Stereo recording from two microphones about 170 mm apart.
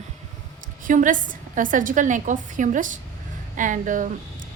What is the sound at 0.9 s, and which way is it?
A woman's voice, 50° right (ahead or behind).